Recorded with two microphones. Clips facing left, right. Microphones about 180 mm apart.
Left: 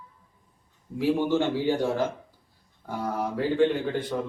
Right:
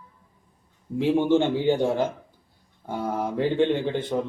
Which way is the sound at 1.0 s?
25° right (ahead or behind).